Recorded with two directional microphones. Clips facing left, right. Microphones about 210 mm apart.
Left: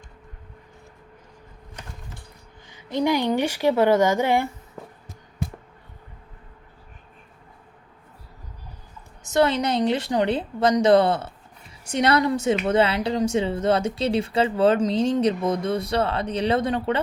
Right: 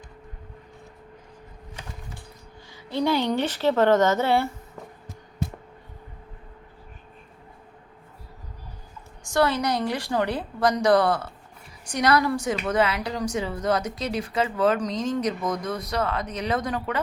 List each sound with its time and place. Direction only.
2.7 s speech: 15° left (ahead or behind)
9.2 s a woman's voice: 20° left (ahead or behind)